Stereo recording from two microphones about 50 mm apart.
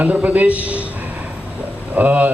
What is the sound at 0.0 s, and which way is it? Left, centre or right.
Speech, right.